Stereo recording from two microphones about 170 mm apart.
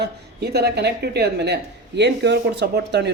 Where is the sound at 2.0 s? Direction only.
90° right.